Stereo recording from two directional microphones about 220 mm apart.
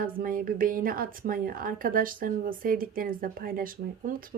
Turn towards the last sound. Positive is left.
turn(degrees=-40)  # may be behind; listen again after turning